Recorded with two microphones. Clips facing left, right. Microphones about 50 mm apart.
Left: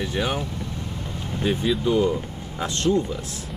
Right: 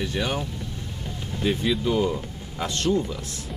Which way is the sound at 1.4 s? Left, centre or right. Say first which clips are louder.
Left 1 dB; centre.